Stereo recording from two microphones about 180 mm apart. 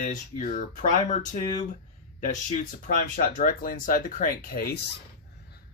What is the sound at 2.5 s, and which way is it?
Speech, 45° left (ahead or behind).